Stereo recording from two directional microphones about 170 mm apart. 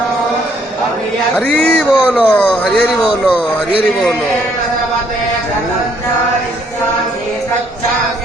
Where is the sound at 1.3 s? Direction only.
10° left (ahead or behind).